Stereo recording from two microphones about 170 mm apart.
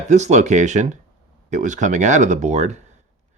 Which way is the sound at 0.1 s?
45° right (ahead or behind).